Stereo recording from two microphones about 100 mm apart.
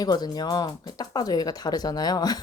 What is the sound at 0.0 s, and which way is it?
Speech, 40° left (ahead or behind).